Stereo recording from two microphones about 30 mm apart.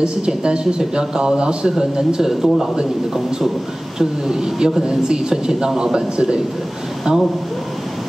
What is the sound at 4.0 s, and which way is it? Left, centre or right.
Speech, centre.